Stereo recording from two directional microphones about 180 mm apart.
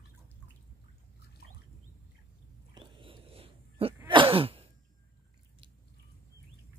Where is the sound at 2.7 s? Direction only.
30° right (ahead or behind).